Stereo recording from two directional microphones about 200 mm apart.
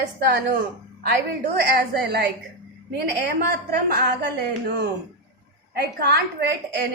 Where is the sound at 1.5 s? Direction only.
50° right (ahead or behind).